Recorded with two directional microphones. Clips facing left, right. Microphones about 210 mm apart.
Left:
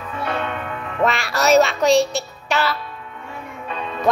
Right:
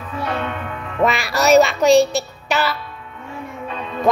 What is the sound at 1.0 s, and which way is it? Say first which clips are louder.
A child's voice: right 2 dB; centre (ahead or behind).